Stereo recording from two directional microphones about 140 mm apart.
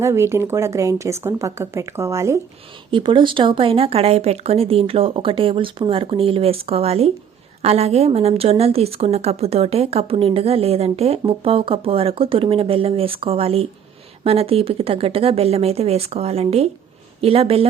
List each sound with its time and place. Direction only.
0.0 s speech: 20° right (ahead or behind)
2.9 s a woman's voice: 35° right (ahead or behind)